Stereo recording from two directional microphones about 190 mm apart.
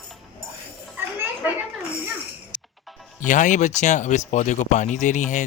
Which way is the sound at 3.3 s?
40° left (ahead or behind).